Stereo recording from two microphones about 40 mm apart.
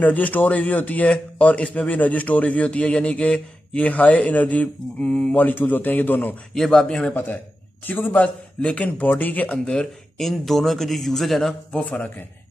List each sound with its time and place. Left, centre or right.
0.0 s speech: left
1.0 s a sound: left
5.3 s speech: left
6.5 s a man's voice: centre
6.9 s a sound: left
7.8 s a man's voice: left
9.7 s speech: centre
10.2 s speech: centre
11.7 s a sound: left